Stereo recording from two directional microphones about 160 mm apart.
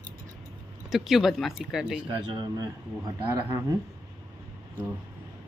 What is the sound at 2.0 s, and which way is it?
Speech, 30° right (ahead or behind).